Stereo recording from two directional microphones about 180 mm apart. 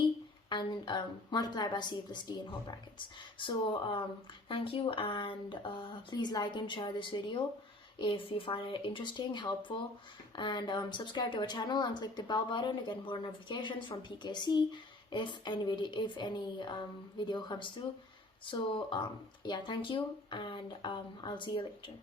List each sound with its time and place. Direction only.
0.5 s speech: 25° left (ahead or behind)